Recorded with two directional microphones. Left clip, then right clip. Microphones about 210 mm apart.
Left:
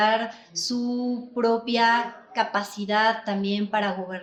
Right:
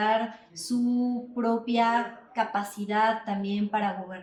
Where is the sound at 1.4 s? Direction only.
40° left (ahead or behind).